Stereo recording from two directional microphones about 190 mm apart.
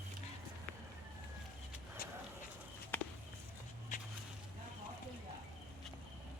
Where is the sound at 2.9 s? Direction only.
10° left (ahead or behind).